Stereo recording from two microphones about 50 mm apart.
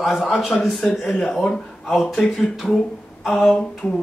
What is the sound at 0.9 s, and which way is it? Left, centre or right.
Speech, centre.